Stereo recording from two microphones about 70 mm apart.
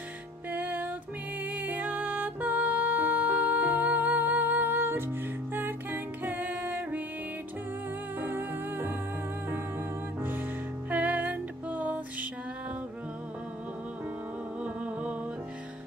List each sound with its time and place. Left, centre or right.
0.5 s music: right
8.2 s music: right
10.9 s music: right
14.6 s music: centre